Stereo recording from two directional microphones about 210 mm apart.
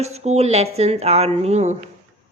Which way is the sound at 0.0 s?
30° right (ahead or behind).